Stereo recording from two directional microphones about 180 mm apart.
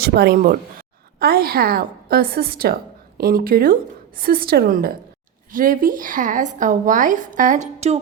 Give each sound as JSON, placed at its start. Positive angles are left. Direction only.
{"t": 0.0, "sound": "a woman's voice", "side_deg": -60}